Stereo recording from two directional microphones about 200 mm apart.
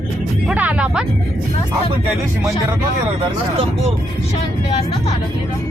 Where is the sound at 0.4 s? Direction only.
5° right (ahead or behind).